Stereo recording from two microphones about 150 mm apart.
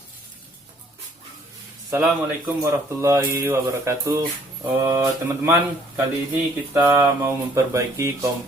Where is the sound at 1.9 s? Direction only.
15° right (ahead or behind).